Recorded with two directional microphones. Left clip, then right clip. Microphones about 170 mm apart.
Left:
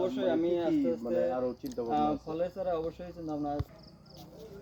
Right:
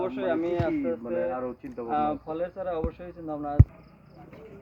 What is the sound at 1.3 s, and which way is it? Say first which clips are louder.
Speech: even; 30° left (ahead or behind).